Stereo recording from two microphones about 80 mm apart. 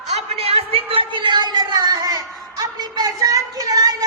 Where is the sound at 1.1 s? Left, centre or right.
Right.